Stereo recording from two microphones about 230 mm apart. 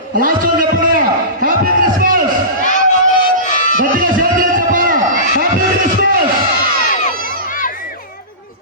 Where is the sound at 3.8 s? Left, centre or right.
Right.